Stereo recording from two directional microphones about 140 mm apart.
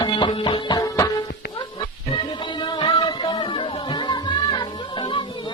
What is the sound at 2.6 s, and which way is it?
Music, 35° left (ahead or behind).